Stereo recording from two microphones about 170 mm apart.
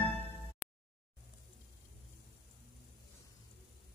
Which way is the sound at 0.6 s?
10° right (ahead or behind).